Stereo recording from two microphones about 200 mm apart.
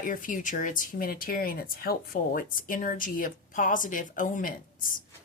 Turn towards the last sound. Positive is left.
turn(degrees=45)  # may be behind; listen again after turning